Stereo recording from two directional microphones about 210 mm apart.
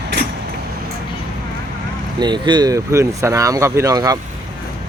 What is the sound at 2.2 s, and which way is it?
Speech, 20° right (ahead or behind).